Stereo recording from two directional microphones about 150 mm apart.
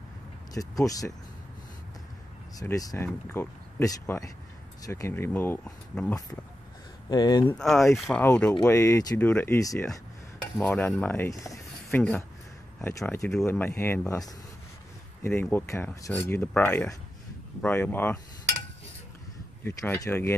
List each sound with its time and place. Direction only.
0.6 s speech: 25° left (ahead or behind)
2.6 s speech: 20° left (ahead or behind)
7.1 s speech: 25° left (ahead or behind)
7.4 s speech: 5° left (ahead or behind); by 11.6 s 20° left (ahead or behind)
11.9 s speech: 5° left (ahead or behind)
19.6 s speech: 20° left (ahead or behind)